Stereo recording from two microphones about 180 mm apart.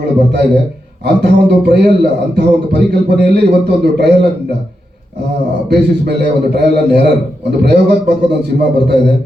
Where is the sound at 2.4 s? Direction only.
65° right (ahead or behind).